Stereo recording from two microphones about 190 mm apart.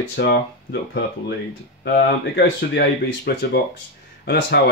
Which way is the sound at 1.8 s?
60° left (ahead or behind).